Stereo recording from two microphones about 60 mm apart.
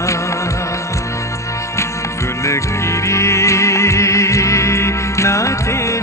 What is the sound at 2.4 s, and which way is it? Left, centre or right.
Music, left.